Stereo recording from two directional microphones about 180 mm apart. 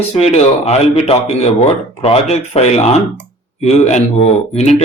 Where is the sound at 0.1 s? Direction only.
35° left (ahead or behind).